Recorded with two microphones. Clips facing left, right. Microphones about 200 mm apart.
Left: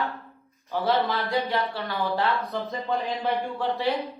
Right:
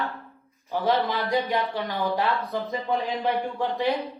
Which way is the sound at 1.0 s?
15° right (ahead or behind).